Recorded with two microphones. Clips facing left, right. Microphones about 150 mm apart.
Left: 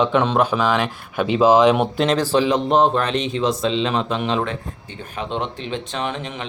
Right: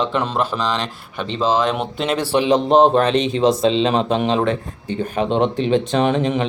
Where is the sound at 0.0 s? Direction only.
Centre (ahead or behind).